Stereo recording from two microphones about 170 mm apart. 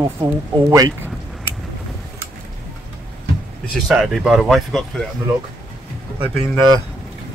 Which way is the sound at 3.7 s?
Centre (ahead or behind).